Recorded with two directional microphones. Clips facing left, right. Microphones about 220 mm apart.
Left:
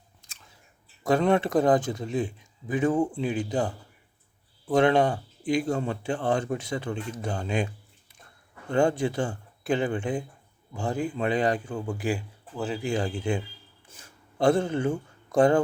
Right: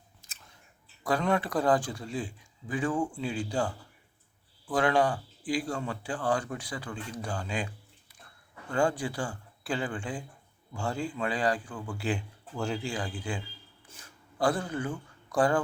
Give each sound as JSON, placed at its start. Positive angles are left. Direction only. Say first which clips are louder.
{"t": 0.2, "sound": "scissors", "louder": "left 1 dB", "side_deg": -5}
{"t": 1.0, "sound": "speech", "louder": "left 6 dB", "side_deg": 25}
{"t": 4.7, "sound": "speech", "louder": "left 5 dB", "side_deg": 25}
{"t": 8.7, "sound": "speech", "louder": "left 5 dB", "side_deg": 25}
{"t": 12.0, "sound": "speech", "louder": "left 3 dB", "side_deg": 5}
{"t": 12.8, "sound": "speech", "louder": "left 7 dB", "side_deg": 25}